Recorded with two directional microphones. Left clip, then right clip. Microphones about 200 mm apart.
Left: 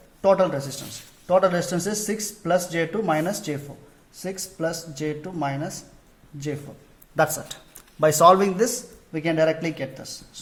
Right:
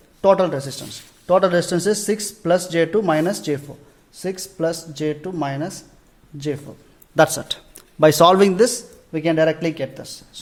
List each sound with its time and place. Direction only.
0.2 s speech: 55° right (ahead or behind)
7.2 s a man's voice: 40° right (ahead or behind)